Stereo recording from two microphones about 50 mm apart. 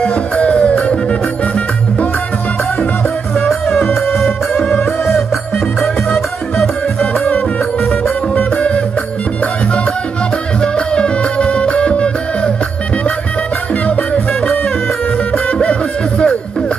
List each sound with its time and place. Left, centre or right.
0.0 s music: left
3.3 s music: centre
7.0 s music: left
10.6 s music: left
15.3 s music: left